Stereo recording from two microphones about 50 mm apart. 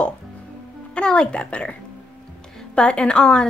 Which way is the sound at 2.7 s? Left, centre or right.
Centre.